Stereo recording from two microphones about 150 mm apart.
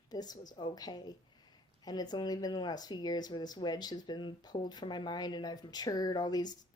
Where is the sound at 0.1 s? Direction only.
25° left (ahead or behind).